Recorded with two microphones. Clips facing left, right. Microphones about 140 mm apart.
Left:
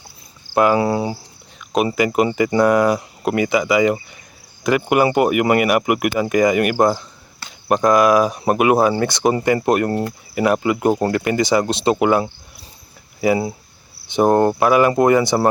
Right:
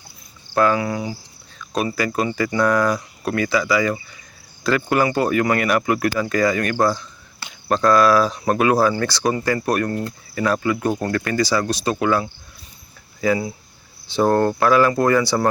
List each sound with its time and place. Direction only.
0.5 s cricket: 15° left (ahead or behind)
0.8 s speech: 30° left (ahead or behind)
1.5 s a sound: 20° left (ahead or behind)
2.1 s speech: 20° left (ahead or behind)
14.1 s speech: 20° left (ahead or behind)